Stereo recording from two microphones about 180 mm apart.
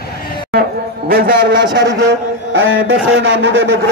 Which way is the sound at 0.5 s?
55° right (ahead or behind).